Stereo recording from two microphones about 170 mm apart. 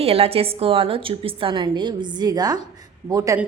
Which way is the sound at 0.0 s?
35° right (ahead or behind).